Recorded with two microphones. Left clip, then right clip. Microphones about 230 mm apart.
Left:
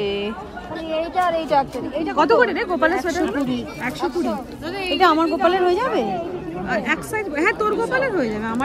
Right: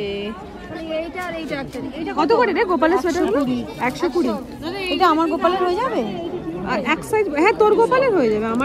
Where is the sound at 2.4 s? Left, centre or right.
Right.